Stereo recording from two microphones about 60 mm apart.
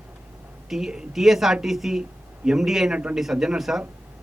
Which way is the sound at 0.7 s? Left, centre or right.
Centre.